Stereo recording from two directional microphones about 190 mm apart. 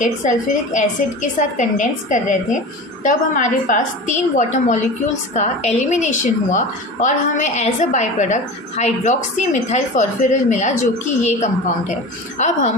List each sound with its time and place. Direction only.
0.0 s a woman's voice: 40° left (ahead or behind)